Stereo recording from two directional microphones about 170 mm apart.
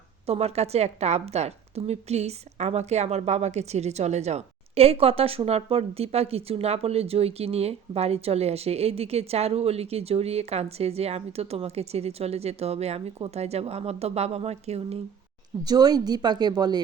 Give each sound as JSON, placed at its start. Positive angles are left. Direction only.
{"t": 0.3, "sound": "a woman's voice", "side_deg": -35}
{"t": 15.6, "sound": "a woman's voice", "side_deg": -25}